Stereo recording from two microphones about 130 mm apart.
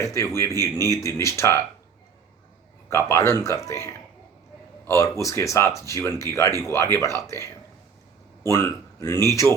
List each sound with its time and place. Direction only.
0.0 s speech: 25° left (ahead or behind)
2.9 s speech: 20° left (ahead or behind)